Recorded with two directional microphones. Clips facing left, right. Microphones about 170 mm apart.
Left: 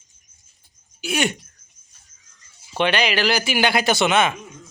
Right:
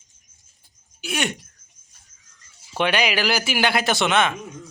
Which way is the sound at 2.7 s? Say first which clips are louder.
Left 1 dB; 5° right (ahead or behind).